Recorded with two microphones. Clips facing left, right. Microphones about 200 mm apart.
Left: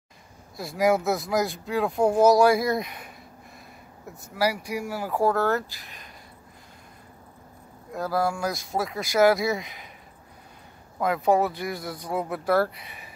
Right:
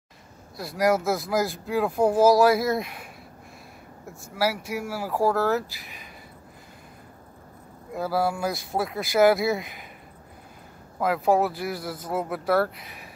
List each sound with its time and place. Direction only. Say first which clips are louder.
0.6 s speech: even; centre (ahead or behind)
4.4 s speech: even; 5° right (ahead or behind)
7.9 s speech: right 1 dB; 5° right (ahead or behind)
11.0 s speech: even; 5° right (ahead or behind)